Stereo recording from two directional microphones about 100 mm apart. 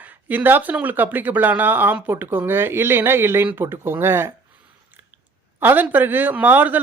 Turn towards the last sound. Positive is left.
turn(degrees=-20)  # may be behind; listen again after turning